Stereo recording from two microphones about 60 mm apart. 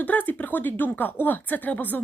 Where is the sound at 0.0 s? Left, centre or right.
Left.